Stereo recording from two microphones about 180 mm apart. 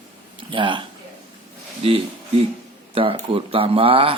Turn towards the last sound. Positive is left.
turn(degrees=-30)  # may be behind; listen again after turning